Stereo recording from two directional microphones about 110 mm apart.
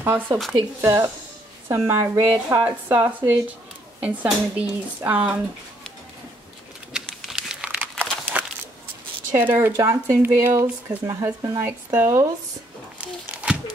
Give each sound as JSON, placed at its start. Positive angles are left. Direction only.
{"t": 0.3, "sound": "speech", "side_deg": -35}
{"t": 6.9, "sound": "crumpling", "side_deg": -5}
{"t": 9.3, "sound": "speech", "side_deg": -20}
{"t": 13.3, "sound": "a sound", "side_deg": -10}